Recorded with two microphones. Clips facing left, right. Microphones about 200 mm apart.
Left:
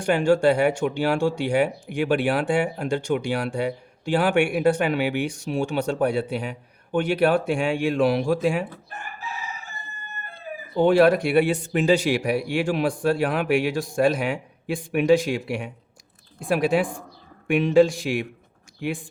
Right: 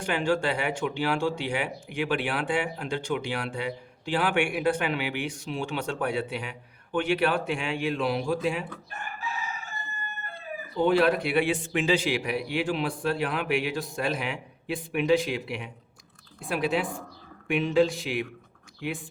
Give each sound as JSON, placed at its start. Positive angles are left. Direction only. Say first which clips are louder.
{"t": 0.0, "sound": "speech", "louder": "left 8 dB", "side_deg": 45}
{"t": 10.8, "sound": "speech", "louder": "left 6 dB", "side_deg": 45}